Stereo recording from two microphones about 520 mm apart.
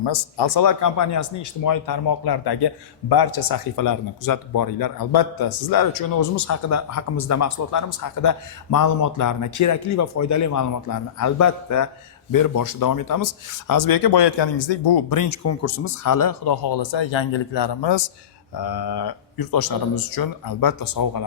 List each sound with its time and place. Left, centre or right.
0.0 s speech: left